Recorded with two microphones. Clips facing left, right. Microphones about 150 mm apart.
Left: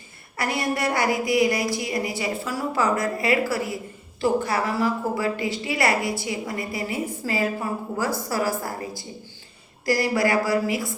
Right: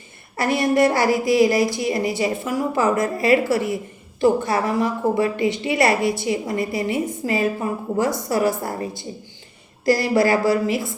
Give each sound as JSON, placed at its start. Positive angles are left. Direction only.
{"t": 0.3, "sound": "a woman's voice", "side_deg": -20}
{"t": 10.2, "sound": "a woman's voice", "side_deg": -25}